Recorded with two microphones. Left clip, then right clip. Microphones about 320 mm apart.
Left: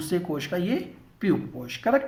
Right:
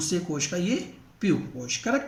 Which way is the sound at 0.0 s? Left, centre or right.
Left.